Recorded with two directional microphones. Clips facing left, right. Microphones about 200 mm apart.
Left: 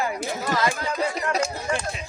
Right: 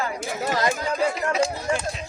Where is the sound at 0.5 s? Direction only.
40° right (ahead or behind).